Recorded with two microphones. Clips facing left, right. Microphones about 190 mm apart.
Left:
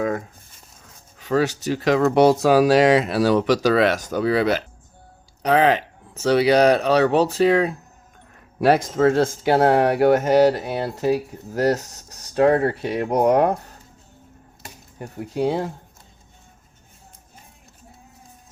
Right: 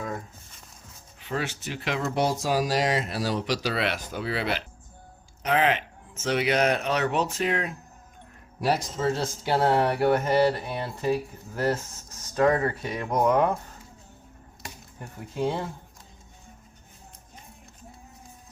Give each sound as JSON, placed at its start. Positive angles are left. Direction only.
{"t": 1.2, "sound": "speech", "side_deg": 40}
{"t": 2.0, "sound": "speech", "side_deg": 65}
{"t": 8.6, "sound": "speech", "side_deg": 60}
{"t": 10.0, "sound": "a sound", "side_deg": 90}
{"t": 10.3, "sound": "speech", "side_deg": 90}
{"t": 10.8, "sound": "speech", "side_deg": 40}
{"t": 11.1, "sound": "speech", "side_deg": 75}